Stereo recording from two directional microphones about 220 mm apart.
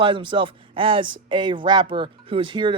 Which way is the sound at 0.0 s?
20° right (ahead or behind).